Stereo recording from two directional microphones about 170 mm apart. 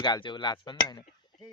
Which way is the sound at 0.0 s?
25° left (ahead or behind).